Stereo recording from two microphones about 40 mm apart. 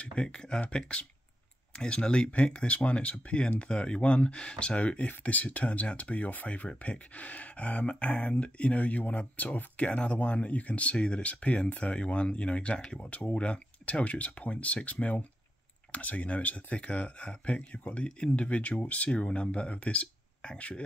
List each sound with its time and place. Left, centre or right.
0.0 s speech: left
19.1 s speech: left